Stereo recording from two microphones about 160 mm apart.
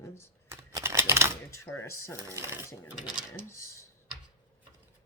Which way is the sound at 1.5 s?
15° left (ahead or behind).